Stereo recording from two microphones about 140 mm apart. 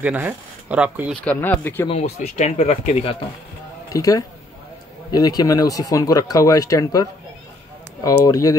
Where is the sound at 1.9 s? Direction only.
50° left (ahead or behind).